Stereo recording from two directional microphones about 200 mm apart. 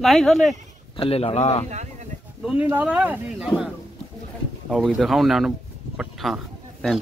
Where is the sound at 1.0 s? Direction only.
30° left (ahead or behind).